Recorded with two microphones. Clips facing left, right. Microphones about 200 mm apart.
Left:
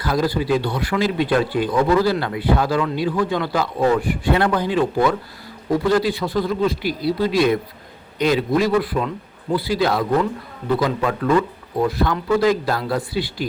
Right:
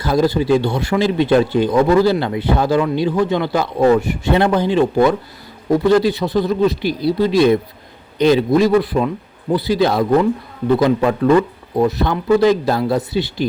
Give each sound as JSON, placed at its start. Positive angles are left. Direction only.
{"t": 0.0, "sound": "speech", "side_deg": -25}